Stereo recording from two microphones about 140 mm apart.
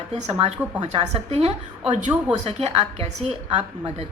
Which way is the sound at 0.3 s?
50° right (ahead or behind).